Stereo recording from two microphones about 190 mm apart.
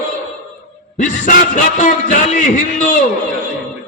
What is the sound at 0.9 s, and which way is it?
A man's voice, 45° left (ahead or behind).